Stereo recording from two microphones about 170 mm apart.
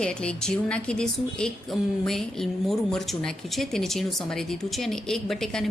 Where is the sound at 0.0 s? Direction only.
5° left (ahead or behind).